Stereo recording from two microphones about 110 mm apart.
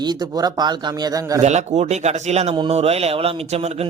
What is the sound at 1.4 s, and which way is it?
Speech, 90° right.